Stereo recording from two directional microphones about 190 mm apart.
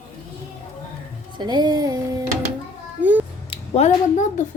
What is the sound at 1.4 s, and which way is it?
Speech, 20° right (ahead or behind).